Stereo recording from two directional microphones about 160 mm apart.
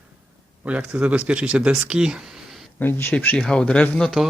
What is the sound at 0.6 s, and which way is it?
Speech, 10° right (ahead or behind).